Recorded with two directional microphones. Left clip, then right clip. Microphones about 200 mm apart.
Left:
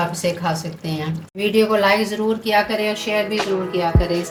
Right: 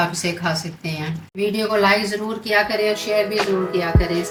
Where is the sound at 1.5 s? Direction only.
55° left (ahead or behind).